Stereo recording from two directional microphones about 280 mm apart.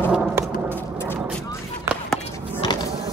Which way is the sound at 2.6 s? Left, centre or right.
Centre.